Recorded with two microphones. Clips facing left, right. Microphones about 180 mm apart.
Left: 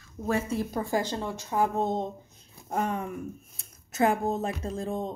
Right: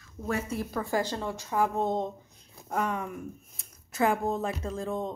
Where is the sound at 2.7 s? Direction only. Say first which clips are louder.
Left 1 dB; 35° left (ahead or behind).